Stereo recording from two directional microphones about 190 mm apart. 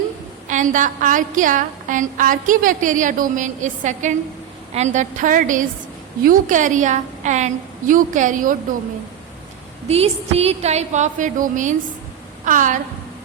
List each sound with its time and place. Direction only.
0.4 s a woman's voice: 40° right (ahead or behind)
9.8 s a woman's voice: 30° right (ahead or behind)